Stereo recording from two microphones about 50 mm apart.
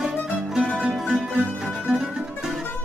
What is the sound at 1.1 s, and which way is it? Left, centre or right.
Music, centre.